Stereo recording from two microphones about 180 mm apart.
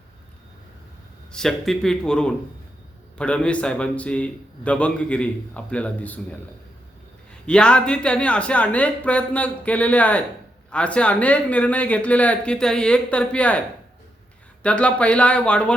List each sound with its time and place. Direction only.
1.3 s a man's voice: centre (ahead or behind)
7.4 s a man's voice: 5° left (ahead or behind)
14.6 s a man's voice: 5° left (ahead or behind)